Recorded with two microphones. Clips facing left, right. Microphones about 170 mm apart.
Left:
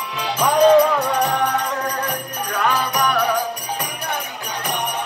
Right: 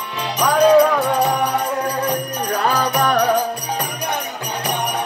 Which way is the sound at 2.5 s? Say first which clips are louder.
Right 2 dB; 35° right (ahead or behind).